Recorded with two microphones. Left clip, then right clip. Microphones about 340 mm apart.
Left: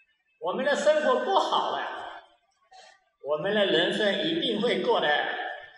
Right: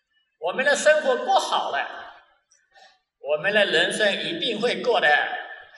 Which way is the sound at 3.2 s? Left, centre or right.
Right.